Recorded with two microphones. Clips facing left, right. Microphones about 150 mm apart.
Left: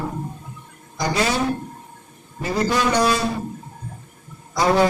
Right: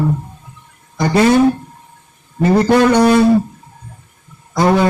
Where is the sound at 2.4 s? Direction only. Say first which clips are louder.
Right 10 dB; 60° right (ahead or behind).